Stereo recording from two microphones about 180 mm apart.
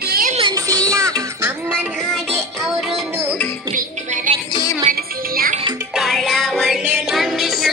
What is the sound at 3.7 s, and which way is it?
Music, 45° right (ahead or behind).